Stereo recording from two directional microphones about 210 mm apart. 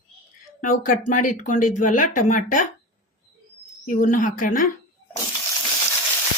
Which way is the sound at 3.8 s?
40° left (ahead or behind).